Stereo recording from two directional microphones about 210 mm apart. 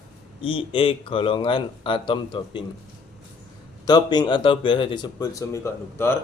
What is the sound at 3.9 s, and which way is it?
Speech, 20° left (ahead or behind).